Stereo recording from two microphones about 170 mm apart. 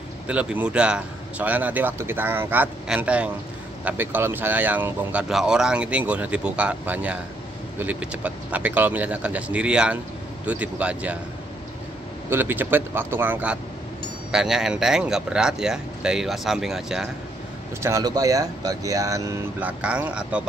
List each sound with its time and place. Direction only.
0.3 s speech: 5° right (ahead or behind)
12.3 s speech: 10° right (ahead or behind)
17.8 s speech: 20° right (ahead or behind)